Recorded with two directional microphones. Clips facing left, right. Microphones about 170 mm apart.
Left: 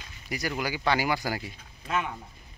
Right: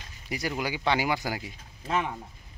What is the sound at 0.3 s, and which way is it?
Speech, 25° right (ahead or behind).